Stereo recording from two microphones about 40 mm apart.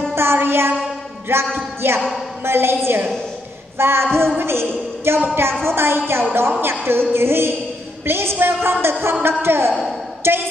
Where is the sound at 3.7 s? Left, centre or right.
Right.